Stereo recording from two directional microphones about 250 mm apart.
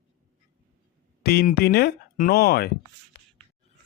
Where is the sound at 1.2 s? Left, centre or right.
Left.